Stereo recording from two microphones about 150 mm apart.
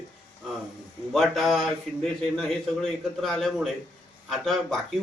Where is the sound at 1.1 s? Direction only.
Centre (ahead or behind).